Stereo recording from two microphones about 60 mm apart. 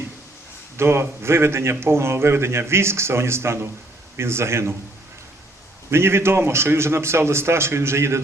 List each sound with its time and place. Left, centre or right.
0.8 s a man's voice: right
5.9 s a man's voice: right